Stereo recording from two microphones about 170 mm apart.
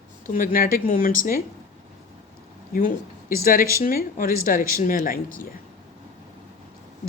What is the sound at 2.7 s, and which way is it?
Speech, 55° left (ahead or behind).